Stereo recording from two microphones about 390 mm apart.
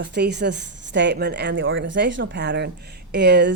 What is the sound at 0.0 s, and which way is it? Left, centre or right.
A woman's voice, right.